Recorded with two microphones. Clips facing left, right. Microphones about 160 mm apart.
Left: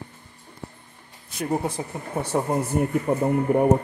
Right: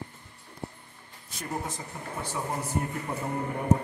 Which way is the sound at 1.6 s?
70° left (ahead or behind).